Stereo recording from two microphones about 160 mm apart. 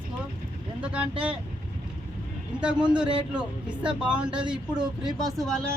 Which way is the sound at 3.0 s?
5° right (ahead or behind).